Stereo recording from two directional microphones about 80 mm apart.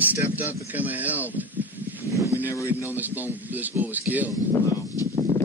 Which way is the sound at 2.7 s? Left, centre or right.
Right.